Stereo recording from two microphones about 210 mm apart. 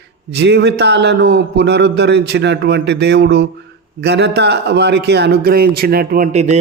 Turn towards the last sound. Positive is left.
turn(degrees=-30)  # may be behind; listen again after turning